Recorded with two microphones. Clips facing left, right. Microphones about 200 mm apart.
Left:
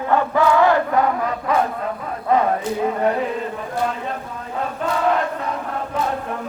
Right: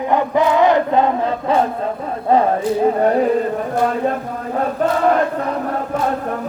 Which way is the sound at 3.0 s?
40° right (ahead or behind).